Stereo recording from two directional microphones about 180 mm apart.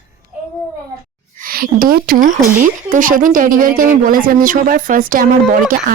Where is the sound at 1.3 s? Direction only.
50° right (ahead or behind).